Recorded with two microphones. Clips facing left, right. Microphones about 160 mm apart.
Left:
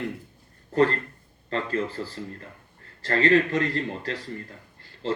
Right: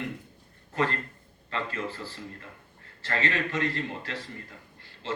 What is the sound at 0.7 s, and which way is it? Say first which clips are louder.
A man's voice: left 7 dB; 35° left (ahead or behind).